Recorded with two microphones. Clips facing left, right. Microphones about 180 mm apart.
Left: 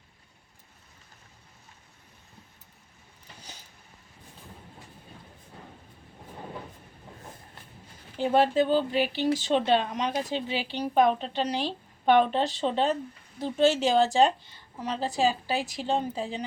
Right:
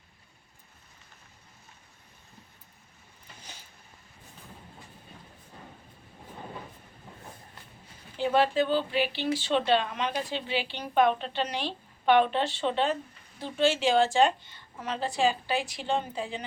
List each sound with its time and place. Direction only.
8.2 s speech: 45° left (ahead or behind)